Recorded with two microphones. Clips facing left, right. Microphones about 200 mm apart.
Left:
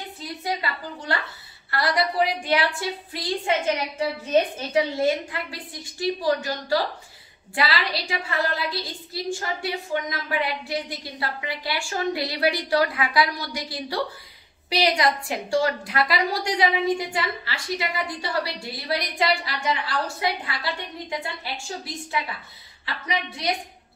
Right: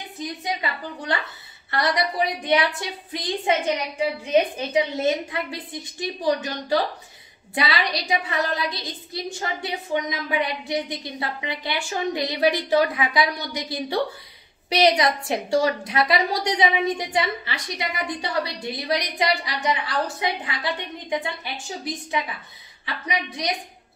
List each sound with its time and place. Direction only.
0.2 s a woman's voice: 20° right (ahead or behind)
23.0 s a woman's voice: 20° right (ahead or behind)